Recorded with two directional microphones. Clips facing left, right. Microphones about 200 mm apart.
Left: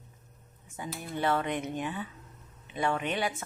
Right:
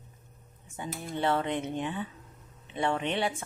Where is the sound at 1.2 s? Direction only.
25° right (ahead or behind).